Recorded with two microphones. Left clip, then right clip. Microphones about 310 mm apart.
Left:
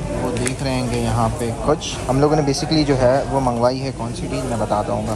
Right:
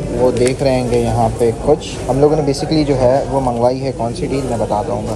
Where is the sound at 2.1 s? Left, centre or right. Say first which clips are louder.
Right 4 dB; left.